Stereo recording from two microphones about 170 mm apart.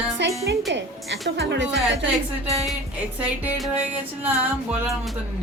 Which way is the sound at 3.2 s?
5° right (ahead or behind).